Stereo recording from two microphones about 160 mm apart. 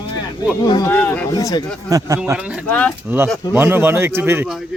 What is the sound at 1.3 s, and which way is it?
Speech, 25° left (ahead or behind).